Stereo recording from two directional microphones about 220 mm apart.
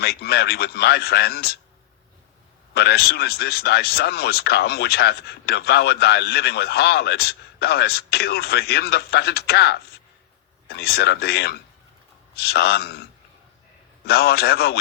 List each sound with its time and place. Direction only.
0.0 s speech: 45° left (ahead or behind)
2.7 s speech: 45° left (ahead or behind)
14.0 s speech: 45° left (ahead or behind)